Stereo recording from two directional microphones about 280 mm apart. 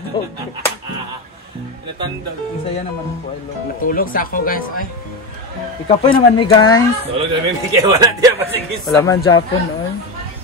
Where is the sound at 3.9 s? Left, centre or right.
Left.